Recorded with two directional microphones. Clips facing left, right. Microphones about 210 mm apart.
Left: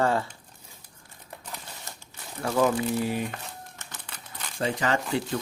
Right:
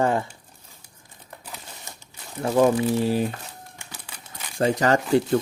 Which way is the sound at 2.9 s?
30° right (ahead or behind).